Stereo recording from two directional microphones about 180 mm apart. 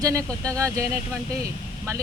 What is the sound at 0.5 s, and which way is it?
Speech, 15° right (ahead or behind).